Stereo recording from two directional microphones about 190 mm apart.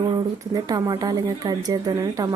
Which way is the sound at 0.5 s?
20° right (ahead or behind).